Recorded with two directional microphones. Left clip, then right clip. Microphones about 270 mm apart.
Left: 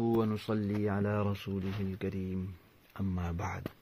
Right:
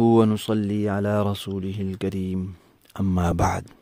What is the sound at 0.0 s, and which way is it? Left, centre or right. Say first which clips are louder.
Speech: right 13 dB; right.